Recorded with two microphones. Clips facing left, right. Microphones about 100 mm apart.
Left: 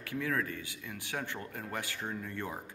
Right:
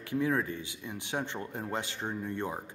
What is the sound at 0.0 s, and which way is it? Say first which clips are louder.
A man's voice: right 4 dB; 20° right (ahead or behind).